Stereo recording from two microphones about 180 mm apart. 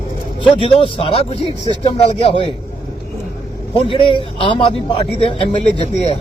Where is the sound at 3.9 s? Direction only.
30° left (ahead or behind).